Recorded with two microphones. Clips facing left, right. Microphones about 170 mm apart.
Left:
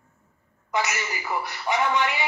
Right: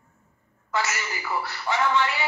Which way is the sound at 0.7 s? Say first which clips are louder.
Left 1 dB; 15° left (ahead or behind).